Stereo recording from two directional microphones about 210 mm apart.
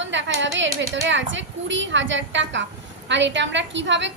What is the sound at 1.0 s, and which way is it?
A woman's voice, 60° right (ahead or behind).